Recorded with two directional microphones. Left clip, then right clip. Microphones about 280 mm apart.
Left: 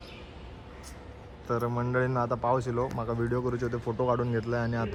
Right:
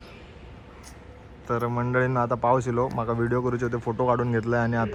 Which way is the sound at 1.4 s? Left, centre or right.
Centre.